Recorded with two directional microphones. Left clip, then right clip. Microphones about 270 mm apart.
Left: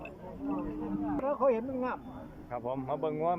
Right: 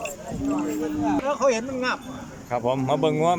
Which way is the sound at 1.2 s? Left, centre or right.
Centre.